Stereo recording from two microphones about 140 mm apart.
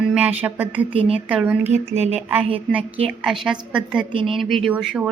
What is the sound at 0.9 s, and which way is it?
Speech, 40° right (ahead or behind).